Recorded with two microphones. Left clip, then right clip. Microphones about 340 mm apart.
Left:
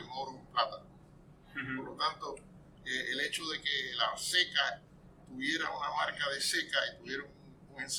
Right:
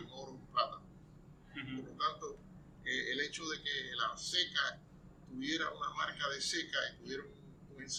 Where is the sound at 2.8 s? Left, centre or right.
Centre.